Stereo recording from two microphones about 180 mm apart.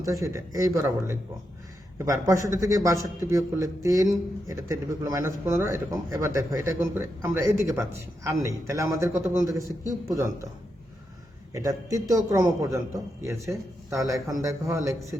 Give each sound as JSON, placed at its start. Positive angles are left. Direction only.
{"t": 0.0, "sound": "a man's voice", "side_deg": -15}
{"t": 11.5, "sound": "a man's voice", "side_deg": -20}